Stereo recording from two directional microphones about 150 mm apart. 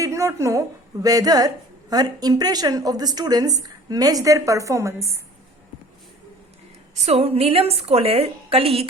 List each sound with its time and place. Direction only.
0.0 s a sound: 20° right (ahead or behind)
1.0 s speech: 25° right (ahead or behind)
6.9 s a woman's voice: 45° right (ahead or behind)